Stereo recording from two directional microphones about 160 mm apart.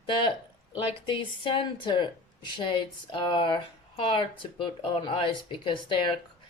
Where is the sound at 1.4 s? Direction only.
30° left (ahead or behind).